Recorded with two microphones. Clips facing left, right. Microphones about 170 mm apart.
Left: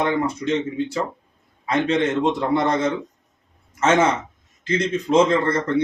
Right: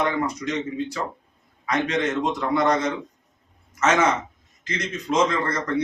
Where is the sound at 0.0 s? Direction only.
30° left (ahead or behind).